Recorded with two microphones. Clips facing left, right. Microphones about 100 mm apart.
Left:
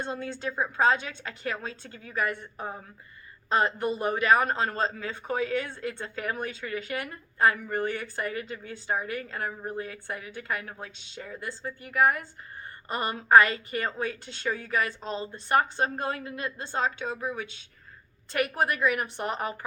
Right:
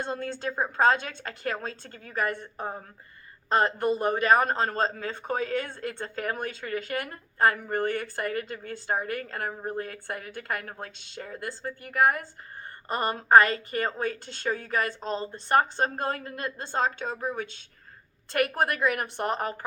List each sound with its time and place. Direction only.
0.0 s a woman's voice: 40° right (ahead or behind)